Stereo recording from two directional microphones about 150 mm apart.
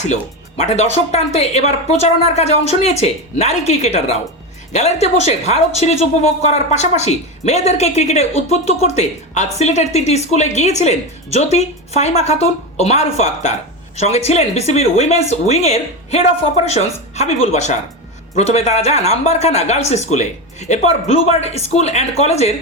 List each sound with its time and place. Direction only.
0.0 s a woman's voice: 50° left (ahead or behind)